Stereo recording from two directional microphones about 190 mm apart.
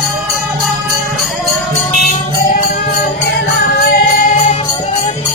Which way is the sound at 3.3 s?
60° left (ahead or behind).